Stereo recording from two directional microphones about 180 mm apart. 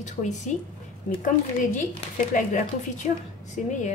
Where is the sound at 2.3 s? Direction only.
45° left (ahead or behind).